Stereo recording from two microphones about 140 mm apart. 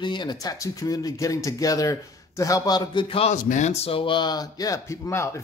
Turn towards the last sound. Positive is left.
turn(degrees=20)  # may be behind; listen again after turning